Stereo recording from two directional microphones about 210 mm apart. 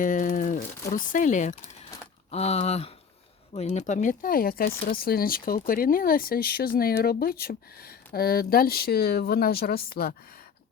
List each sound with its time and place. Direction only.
0.0 s crumpling: 40° left (ahead or behind)
0.9 s speech: 40° left (ahead or behind)